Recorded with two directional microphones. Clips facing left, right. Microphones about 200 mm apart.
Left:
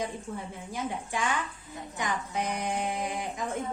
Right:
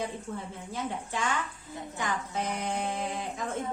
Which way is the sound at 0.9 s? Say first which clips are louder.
Left 1 dB; 15° left (ahead or behind).